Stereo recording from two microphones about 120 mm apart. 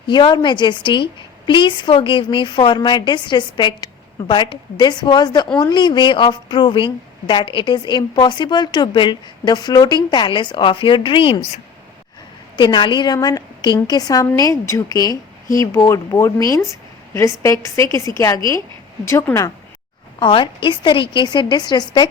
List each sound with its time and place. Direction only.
0.1 s a woman's voice: 40° left (ahead or behind)
12.5 s a woman's voice: 40° left (ahead or behind); by 19.5 s 20° left (ahead or behind)
20.1 s a woman's voice: 45° left (ahead or behind)